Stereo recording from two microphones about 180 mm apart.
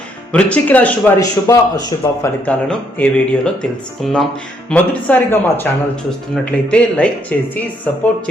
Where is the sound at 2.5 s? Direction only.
5° left (ahead or behind).